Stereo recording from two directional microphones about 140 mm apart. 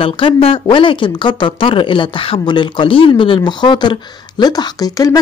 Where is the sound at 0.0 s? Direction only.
40° left (ahead or behind).